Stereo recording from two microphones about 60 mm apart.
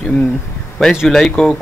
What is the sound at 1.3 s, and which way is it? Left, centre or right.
Speech, centre.